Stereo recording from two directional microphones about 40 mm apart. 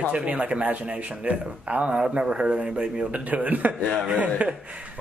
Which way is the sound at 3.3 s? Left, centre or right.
Right.